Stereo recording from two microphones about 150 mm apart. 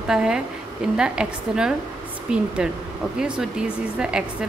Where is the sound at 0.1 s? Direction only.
5° right (ahead or behind).